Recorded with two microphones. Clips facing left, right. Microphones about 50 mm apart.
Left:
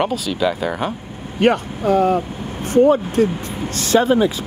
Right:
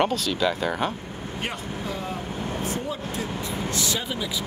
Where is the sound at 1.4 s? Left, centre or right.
Left.